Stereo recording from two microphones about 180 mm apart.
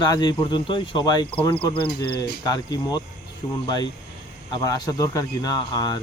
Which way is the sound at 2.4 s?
20° left (ahead or behind).